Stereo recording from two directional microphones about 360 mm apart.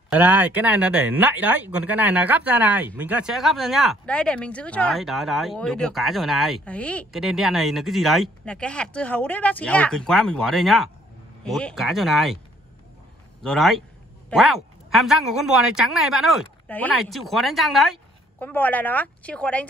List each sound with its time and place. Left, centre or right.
0.1 s speech: centre
13.4 s speech: centre